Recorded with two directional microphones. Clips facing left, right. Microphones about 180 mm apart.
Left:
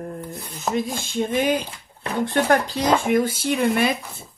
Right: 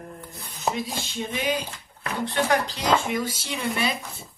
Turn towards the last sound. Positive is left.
turn(degrees=55)  # may be behind; listen again after turning